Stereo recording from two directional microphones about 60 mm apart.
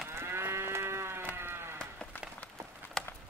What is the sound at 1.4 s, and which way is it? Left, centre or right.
Sheep, right.